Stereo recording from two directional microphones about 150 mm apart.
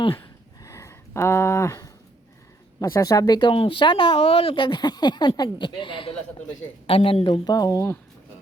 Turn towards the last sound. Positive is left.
turn(degrees=25)  # may be behind; listen again after turning